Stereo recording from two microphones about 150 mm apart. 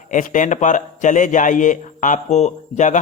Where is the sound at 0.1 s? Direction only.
60° left (ahead or behind).